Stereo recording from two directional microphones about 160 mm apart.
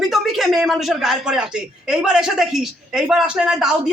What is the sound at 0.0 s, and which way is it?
Speech, centre (ahead or behind).